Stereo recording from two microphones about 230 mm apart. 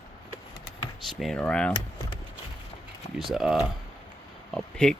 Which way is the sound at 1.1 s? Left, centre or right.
Centre.